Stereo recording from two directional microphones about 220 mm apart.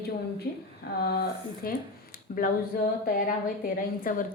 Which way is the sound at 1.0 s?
45° left (ahead or behind).